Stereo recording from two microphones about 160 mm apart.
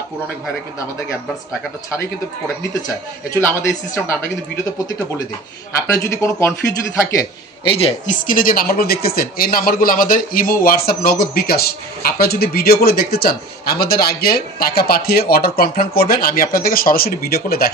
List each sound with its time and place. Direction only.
2.7 s speech: 20° left (ahead or behind)
5.9 s speech: 20° left (ahead or behind)
7.6 s a woman's voice: 35° left (ahead or behind)
8.1 s speech: 60° left (ahead or behind)